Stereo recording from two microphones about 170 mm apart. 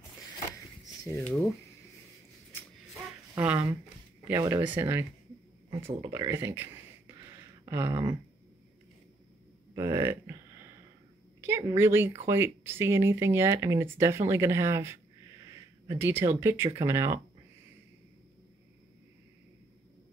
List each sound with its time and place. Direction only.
1.0 s speech: 15° left (ahead or behind)
3.3 s speech: 10° right (ahead or behind)
4.3 s speech: 20° right (ahead or behind)
9.8 s a sound: 15° right (ahead or behind)
11.4 s speech: 15° right (ahead or behind)